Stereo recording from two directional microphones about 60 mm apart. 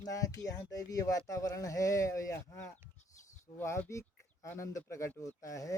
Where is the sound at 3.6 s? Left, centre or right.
Left.